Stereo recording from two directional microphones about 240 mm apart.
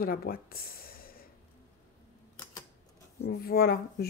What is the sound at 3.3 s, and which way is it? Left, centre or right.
Speech, left.